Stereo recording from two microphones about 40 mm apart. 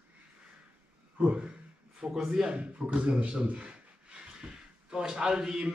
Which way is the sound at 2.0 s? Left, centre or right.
Right.